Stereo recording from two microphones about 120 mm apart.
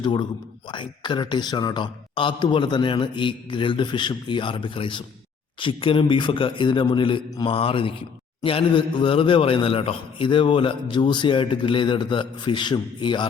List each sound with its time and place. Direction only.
0.0 s a man's voice: 40° left (ahead or behind)